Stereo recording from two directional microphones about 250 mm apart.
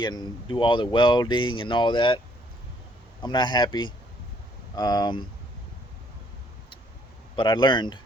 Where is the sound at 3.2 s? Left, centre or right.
Centre.